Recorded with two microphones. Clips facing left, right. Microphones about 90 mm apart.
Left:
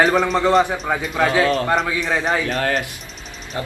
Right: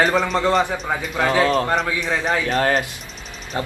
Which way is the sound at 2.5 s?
40° right (ahead or behind).